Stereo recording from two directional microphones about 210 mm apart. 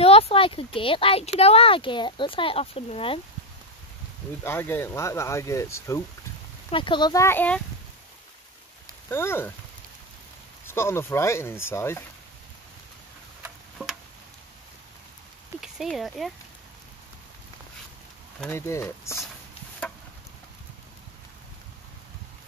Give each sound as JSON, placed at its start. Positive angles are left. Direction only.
{"t": 0.0, "sound": "speech", "side_deg": 30}
{"t": 4.5, "sound": "speech", "side_deg": 10}
{"t": 9.1, "sound": "speech", "side_deg": 10}
{"t": 10.7, "sound": "speech", "side_deg": 10}
{"t": 13.4, "sound": "tick-tock", "side_deg": 0}
{"t": 15.6, "sound": "speech", "side_deg": 0}
{"t": 18.4, "sound": "speech", "side_deg": 15}